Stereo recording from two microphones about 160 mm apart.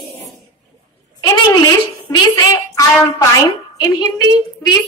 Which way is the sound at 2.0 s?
20° left (ahead or behind).